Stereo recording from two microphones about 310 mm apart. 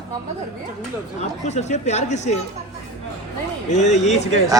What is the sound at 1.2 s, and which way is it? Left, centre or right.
Speech, left.